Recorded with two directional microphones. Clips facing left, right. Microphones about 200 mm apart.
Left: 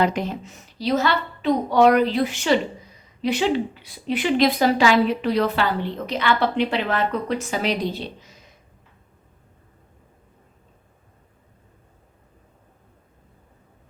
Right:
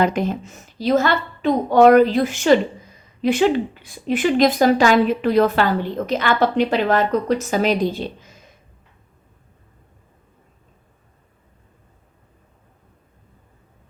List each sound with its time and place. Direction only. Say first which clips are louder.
0.0 s speech: right 3 dB; 50° right (ahead or behind)